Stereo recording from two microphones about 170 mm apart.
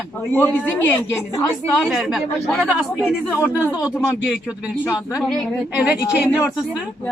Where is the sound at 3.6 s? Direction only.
15° left (ahead or behind).